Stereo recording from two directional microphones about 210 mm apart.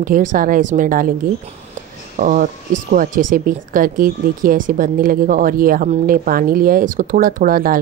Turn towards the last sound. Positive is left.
turn(degrees=-45)  # may be behind; listen again after turning